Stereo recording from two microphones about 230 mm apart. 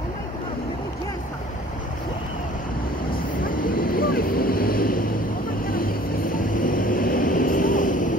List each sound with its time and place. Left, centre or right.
3.4 s vehicle: left